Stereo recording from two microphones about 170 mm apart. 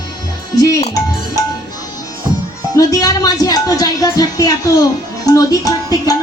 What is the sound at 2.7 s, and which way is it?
A woman's voice, 20° left (ahead or behind).